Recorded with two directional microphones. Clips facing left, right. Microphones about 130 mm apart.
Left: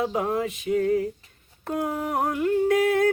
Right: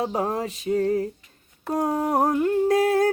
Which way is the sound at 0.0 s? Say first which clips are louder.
Even; 35° right (ahead or behind).